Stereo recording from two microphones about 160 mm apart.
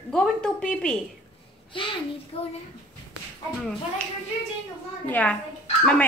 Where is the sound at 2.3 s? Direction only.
40° left (ahead or behind).